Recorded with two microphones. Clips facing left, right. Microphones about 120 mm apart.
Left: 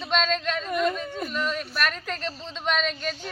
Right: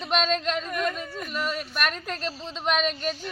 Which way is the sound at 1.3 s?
5° right (ahead or behind).